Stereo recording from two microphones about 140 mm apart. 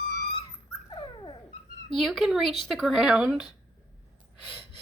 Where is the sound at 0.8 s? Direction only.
35° left (ahead or behind).